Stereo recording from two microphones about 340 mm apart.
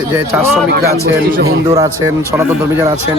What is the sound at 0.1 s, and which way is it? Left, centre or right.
Speech, centre.